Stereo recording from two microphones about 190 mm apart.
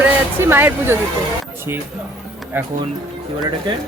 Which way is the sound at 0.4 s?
10° right (ahead or behind).